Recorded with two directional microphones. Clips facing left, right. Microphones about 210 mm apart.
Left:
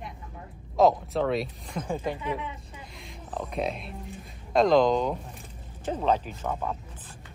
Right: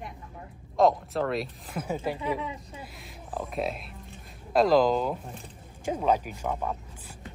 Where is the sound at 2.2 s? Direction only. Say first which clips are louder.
Right 2 dB; 35° right (ahead or behind).